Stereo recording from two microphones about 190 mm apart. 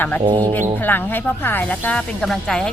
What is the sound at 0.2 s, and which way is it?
Speech, 25° right (ahead or behind).